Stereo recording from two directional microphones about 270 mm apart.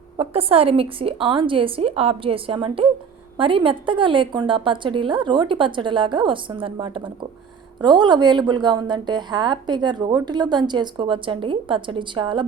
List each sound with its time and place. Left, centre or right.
0.2 s a woman's voice: right